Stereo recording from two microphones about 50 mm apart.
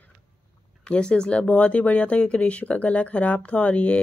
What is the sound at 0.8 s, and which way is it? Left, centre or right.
Speech, centre.